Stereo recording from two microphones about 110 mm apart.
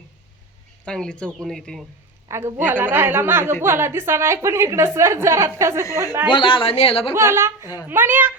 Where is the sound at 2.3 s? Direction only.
20° right (ahead or behind).